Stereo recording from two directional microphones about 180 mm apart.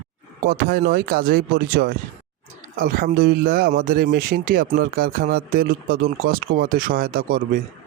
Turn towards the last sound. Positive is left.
turn(degrees=-50)  # may be behind; listen again after turning